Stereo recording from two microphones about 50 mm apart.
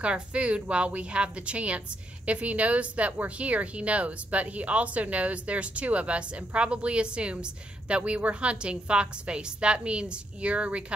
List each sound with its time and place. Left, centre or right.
0.0 s speech: right